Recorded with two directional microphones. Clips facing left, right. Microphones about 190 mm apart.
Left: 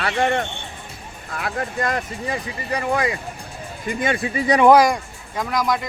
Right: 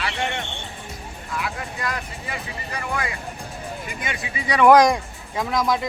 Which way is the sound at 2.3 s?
30° left (ahead or behind).